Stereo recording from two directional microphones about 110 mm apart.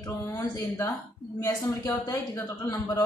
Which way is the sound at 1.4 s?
25° left (ahead or behind).